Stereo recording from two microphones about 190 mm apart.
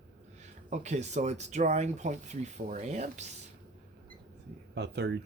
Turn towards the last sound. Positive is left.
turn(degrees=-60)  # may be behind; listen again after turning